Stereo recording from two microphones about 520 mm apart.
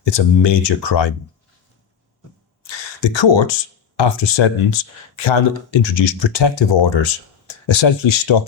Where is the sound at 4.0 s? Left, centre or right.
Left.